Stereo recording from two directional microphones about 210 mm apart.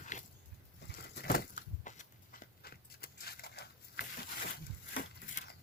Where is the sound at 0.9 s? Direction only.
50° left (ahead or behind).